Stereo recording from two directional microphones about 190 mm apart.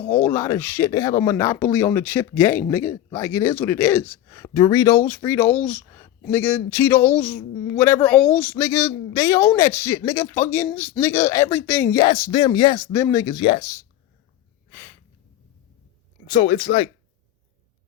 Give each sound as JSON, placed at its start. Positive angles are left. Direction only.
{"t": 0.1, "sound": "speech", "side_deg": 10}
{"t": 14.7, "sound": "a sound", "side_deg": 10}
{"t": 16.3, "sound": "speech", "side_deg": 25}